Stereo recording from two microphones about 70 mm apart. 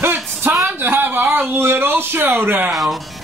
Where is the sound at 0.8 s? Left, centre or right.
Right.